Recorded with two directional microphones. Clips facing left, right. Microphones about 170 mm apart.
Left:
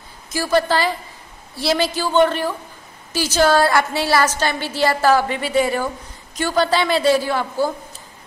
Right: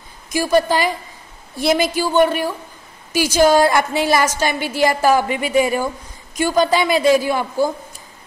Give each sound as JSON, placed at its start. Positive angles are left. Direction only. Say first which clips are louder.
{"t": 0.3, "sound": "a woman's voice", "louder": "right 2 dB", "side_deg": -15}